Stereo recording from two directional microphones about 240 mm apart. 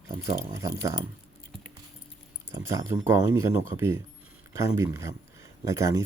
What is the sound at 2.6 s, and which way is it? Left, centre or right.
Speech, centre.